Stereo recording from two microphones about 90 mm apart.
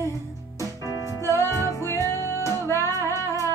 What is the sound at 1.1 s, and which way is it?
Music, 30° left (ahead or behind).